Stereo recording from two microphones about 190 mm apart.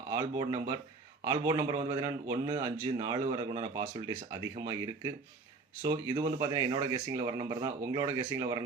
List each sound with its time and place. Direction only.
0.1 s speech: 20° right (ahead or behind)